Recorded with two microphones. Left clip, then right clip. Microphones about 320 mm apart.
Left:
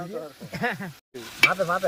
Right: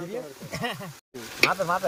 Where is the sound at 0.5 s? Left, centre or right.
Right.